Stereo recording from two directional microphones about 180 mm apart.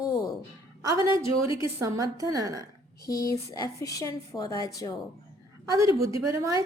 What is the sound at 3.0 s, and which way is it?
Speech, 20° left (ahead or behind).